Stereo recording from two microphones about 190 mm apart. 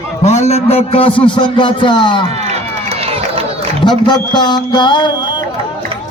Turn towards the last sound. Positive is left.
turn(degrees=25)  # may be behind; listen again after turning